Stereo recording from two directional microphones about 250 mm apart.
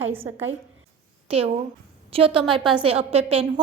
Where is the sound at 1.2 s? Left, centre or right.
Right.